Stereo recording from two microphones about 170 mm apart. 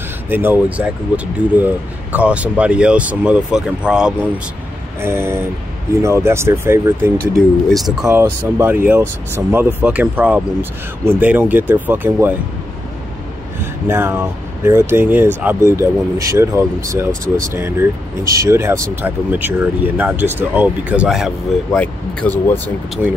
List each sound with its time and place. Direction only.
0.3 s speech: 10° right (ahead or behind)
7.3 s speech: centre (ahead or behind)
8.1 s speech: 15° right (ahead or behind)
13.8 s speech: 15° right (ahead or behind)
21.7 s speech: 10° left (ahead or behind)